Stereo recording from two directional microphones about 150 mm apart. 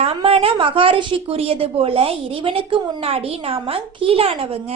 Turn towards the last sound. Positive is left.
turn(degrees=-40)  # may be behind; listen again after turning